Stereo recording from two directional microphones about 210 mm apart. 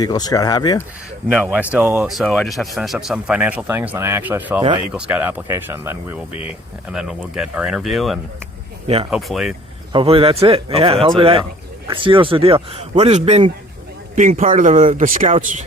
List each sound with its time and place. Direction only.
0.0 s speech: 20° left (ahead or behind)
1.3 s speech: 5° right (ahead or behind)
9.9 s speech: 25° right (ahead or behind)